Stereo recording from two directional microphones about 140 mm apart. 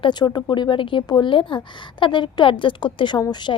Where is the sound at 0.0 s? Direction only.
30° left (ahead or behind).